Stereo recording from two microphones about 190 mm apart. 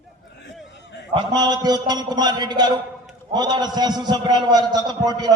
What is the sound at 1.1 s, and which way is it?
A man's voice, 25° right (ahead or behind).